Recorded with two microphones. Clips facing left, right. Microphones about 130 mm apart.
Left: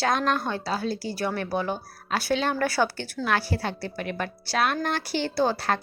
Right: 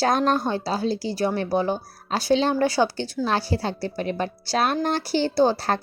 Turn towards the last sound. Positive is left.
turn(degrees=-30)  # may be behind; listen again after turning